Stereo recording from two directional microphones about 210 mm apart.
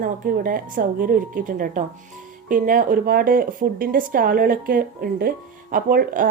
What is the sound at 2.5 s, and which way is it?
Speech, 40° right (ahead or behind).